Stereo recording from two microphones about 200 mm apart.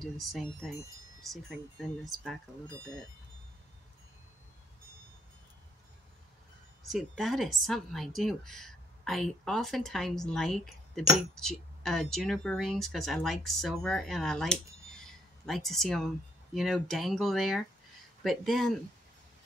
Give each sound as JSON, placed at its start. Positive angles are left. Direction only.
{"t": 0.0, "sound": "speech", "side_deg": 0}
{"t": 6.9, "sound": "speech", "side_deg": 0}